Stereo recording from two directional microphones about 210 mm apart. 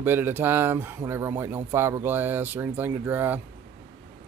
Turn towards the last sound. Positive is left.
turn(degrees=-10)  # may be behind; listen again after turning